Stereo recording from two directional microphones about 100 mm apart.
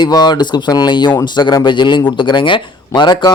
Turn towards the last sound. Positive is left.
turn(degrees=50)  # may be behind; listen again after turning